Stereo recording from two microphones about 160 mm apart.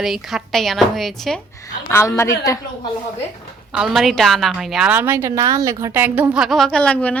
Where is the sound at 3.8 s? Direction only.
Centre (ahead or behind).